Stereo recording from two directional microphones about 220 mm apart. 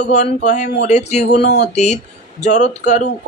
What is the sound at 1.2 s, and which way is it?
Speech, 50° left (ahead or behind).